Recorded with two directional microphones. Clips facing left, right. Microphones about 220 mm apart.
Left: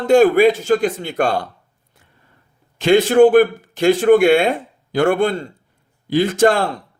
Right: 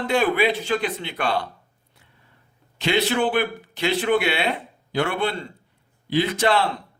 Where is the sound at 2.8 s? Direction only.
50° left (ahead or behind).